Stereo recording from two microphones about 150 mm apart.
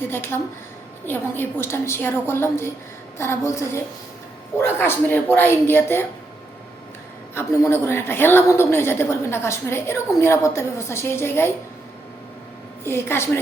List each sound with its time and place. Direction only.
0.1 s a woman's voice: 15° left (ahead or behind)
4.6 s a woman's voice: 15° left (ahead or behind)
7.3 s a woman's voice: 15° left (ahead or behind)
12.8 s a woman's voice: 15° left (ahead or behind)